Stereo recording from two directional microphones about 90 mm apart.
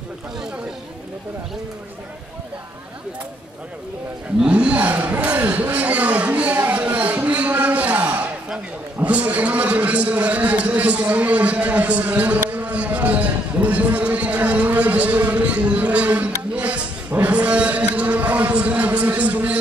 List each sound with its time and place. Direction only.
4.4 s a man's voice: 15° right (ahead or behind)